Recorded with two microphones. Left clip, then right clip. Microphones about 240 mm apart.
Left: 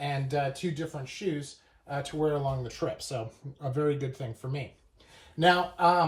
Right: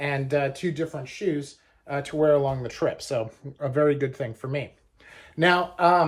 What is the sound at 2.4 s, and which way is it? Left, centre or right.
Speech, right.